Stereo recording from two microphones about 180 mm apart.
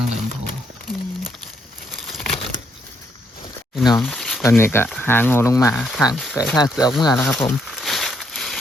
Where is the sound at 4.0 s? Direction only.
5° left (ahead or behind).